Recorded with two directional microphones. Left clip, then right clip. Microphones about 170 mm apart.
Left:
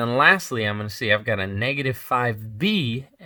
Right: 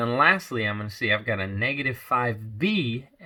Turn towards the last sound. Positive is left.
turn(degrees=40)  # may be behind; listen again after turning